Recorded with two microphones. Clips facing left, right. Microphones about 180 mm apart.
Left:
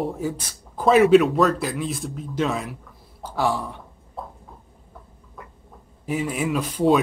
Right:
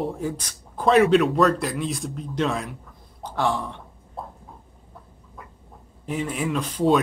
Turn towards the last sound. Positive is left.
turn(degrees=5)  # may be behind; listen again after turning